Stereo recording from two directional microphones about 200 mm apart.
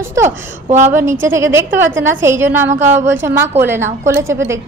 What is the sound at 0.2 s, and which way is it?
Speech, 35° right (ahead or behind).